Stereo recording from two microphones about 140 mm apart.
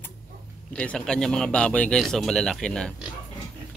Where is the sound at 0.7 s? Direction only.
5° left (ahead or behind).